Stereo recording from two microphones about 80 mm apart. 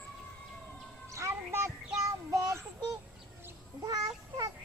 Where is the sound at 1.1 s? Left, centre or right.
Right.